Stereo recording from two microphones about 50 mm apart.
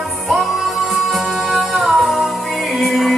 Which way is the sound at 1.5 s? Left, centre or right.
Centre.